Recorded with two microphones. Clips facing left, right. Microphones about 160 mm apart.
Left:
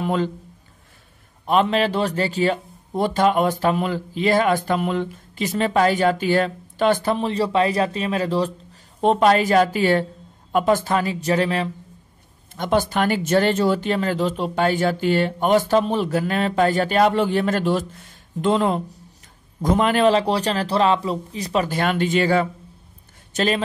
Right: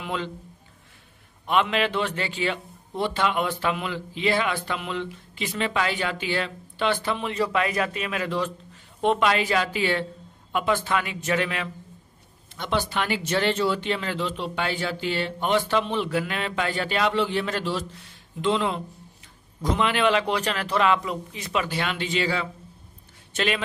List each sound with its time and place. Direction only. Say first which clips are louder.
0.0 s a man's voice: left 8 dB; 40° left (ahead or behind)
1.4 s a man's voice: left 5 dB; 40° left (ahead or behind)
12.5 s a man's voice: left 6 dB; 45° left (ahead or behind)
23.3 s speech: left 5 dB; 40° left (ahead or behind)